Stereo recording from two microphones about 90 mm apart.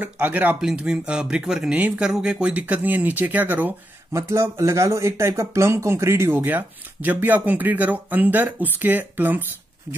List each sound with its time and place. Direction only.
0.0 s speech: 20° right (ahead or behind)
4.1 s speech: 35° right (ahead or behind)